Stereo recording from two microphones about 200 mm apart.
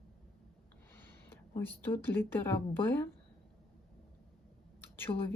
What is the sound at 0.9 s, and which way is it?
Speech, 10° left (ahead or behind).